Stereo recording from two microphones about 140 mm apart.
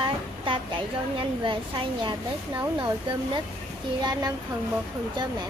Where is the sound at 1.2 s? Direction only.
35° right (ahead or behind).